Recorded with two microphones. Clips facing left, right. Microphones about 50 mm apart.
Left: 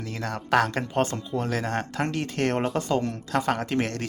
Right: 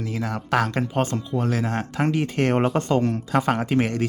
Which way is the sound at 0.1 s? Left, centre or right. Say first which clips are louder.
Left 1 dB; centre.